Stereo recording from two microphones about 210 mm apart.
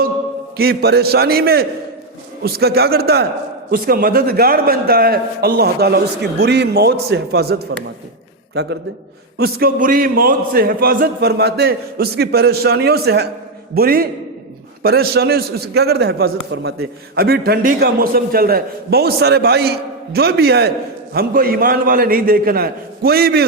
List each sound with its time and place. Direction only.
0.5 s a man's voice: 50° right (ahead or behind)
9.4 s a man's voice: 45° right (ahead or behind)